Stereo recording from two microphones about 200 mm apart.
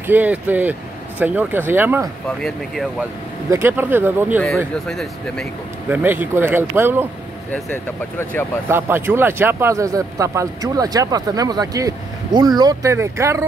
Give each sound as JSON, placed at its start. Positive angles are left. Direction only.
{"t": 0.0, "sound": "speech", "side_deg": -10}
{"t": 2.2, "sound": "speech", "side_deg": 0}
{"t": 3.4, "sound": "speech", "side_deg": -10}
{"t": 4.8, "sound": "speech", "side_deg": 5}
{"t": 5.9, "sound": "speech", "side_deg": -10}
{"t": 7.5, "sound": "speech", "side_deg": 10}
{"t": 8.6, "sound": "speech", "side_deg": -10}